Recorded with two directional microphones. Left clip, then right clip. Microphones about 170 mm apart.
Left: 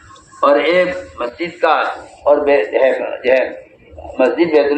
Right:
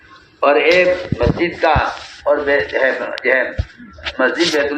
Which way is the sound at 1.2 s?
80° left.